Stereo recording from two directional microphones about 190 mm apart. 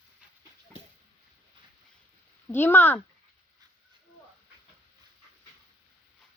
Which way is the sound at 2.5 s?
10° left (ahead or behind).